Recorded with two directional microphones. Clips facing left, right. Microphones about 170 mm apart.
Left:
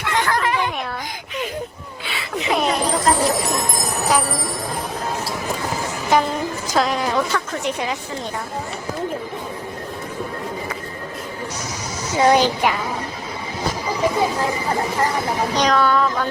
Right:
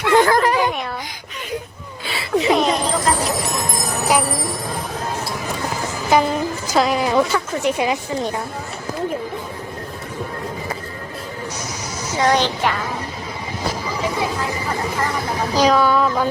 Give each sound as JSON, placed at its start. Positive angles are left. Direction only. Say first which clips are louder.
{"t": 0.1, "sound": "a sound", "louder": "right 6 dB", "side_deg": -40}
{"t": 2.0, "sound": "a sound", "louder": "right 7 dB", "side_deg": -35}
{"t": 2.6, "sound": "jingle bell", "louder": "right 1 dB", "side_deg": 0}
{"t": 4.2, "sound": "music", "louder": "right 2 dB", "side_deg": 0}
{"t": 6.1, "sound": "a woman's voice", "louder": "right 2 dB", "side_deg": 0}
{"t": 12.2, "sound": "a woman's voice", "louder": "left 2 dB", "side_deg": 10}
{"t": 15.5, "sound": "speech", "louder": "right 3 dB", "side_deg": -5}